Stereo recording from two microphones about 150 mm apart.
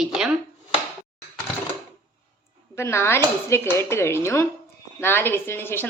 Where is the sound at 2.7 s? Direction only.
15° left (ahead or behind).